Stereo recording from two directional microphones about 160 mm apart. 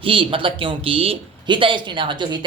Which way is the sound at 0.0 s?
35° right (ahead or behind).